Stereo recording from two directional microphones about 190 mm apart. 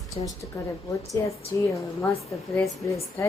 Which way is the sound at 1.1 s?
15° left (ahead or behind).